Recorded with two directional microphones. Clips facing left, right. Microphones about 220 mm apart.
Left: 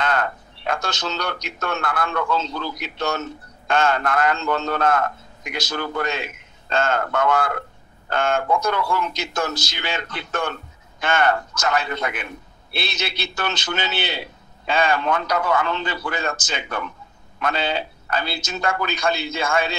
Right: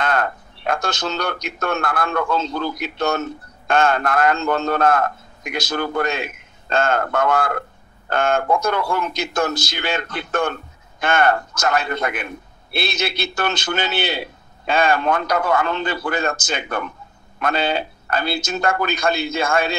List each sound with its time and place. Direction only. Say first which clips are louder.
0.0 s speech: right 2 dB; 50° right (ahead or behind)